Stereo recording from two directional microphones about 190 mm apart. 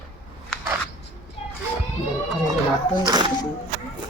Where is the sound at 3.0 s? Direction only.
25° right (ahead or behind).